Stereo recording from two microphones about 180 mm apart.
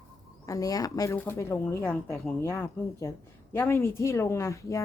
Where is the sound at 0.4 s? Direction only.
20° left (ahead or behind).